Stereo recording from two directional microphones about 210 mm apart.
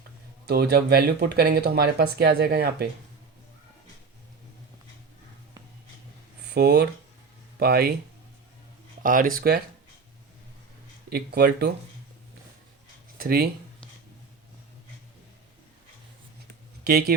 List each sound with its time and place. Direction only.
0.4 s speech: 50° right (ahead or behind)
6.5 s speech: 50° right (ahead or behind)
9.0 s speech: 40° right (ahead or behind)
11.1 s speech: 50° right (ahead or behind)
13.1 s speech: 45° right (ahead or behind)
16.8 s speech: 50° right (ahead or behind)